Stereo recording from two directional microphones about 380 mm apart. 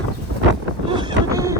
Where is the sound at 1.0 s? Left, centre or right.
Centre.